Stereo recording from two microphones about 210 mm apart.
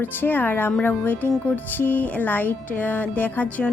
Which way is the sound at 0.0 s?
10° left (ahead or behind).